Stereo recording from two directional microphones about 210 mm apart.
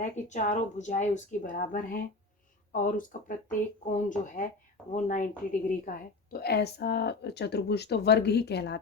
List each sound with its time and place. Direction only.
0.0 s a woman's voice: 35° left (ahead or behind); by 8.8 s 55° left (ahead or behind)